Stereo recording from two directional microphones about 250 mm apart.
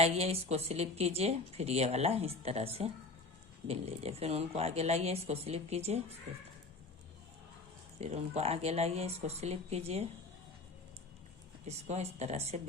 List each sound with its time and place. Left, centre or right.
0.0 s speech: right
7.9 s speech: right
11.6 s speech: right